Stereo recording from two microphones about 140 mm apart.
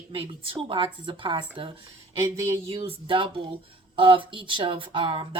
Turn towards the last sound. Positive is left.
turn(degrees=-40)  # may be behind; listen again after turning